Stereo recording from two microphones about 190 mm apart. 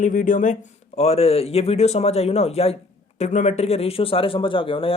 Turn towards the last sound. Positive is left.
turn(degrees=30)  # may be behind; listen again after turning